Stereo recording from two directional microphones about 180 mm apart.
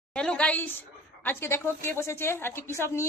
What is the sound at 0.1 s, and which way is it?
A woman's voice, 5° left (ahead or behind).